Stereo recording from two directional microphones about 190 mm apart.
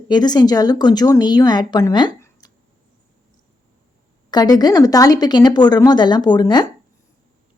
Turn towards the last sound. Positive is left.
turn(degrees=20)  # may be behind; listen again after turning